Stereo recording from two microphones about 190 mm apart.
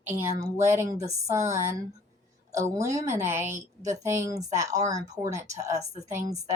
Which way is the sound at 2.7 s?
15° right (ahead or behind).